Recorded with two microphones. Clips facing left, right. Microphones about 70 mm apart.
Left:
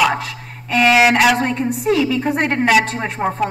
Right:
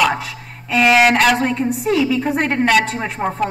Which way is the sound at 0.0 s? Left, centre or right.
Centre.